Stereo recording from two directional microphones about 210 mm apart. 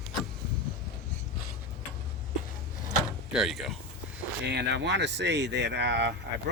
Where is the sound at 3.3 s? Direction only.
Centre (ahead or behind).